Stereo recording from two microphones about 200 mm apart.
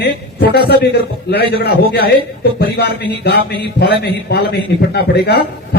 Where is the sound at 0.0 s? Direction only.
55° left (ahead or behind).